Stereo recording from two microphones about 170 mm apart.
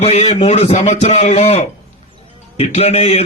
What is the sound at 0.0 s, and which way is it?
A man's voice, 40° left (ahead or behind).